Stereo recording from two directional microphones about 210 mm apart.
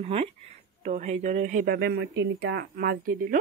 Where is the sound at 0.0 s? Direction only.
25° right (ahead or behind).